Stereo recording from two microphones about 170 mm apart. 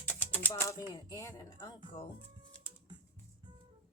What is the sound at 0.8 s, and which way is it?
Speech, 20° left (ahead or behind).